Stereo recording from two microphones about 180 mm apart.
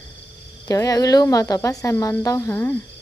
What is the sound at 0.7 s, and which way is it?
Speech, 20° left (ahead or behind).